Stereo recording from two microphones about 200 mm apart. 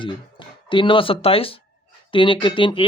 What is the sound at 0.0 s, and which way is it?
Speech, 25° left (ahead or behind).